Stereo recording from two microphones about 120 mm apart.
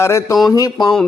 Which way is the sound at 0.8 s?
5° left (ahead or behind).